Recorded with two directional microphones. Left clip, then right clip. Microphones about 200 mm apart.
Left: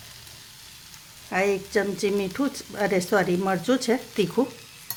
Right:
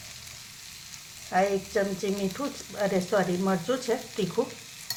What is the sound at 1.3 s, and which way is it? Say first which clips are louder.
Speech: left 2 dB; 45° left (ahead or behind).